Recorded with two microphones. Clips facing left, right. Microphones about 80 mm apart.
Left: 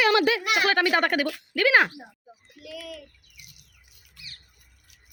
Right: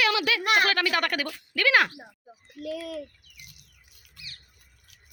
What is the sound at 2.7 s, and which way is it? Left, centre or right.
Speech, right.